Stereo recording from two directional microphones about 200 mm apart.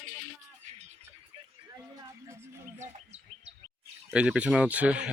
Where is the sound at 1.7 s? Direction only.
15° right (ahead or behind).